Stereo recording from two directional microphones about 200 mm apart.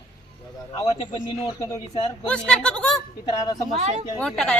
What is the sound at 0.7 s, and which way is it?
Speech, 25° left (ahead or behind).